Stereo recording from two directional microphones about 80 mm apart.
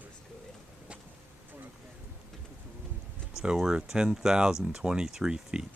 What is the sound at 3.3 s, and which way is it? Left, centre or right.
Speech, centre.